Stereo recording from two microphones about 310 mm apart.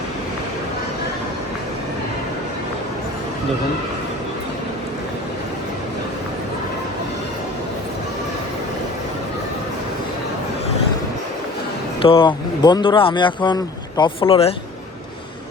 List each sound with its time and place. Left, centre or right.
12.0 s speech: centre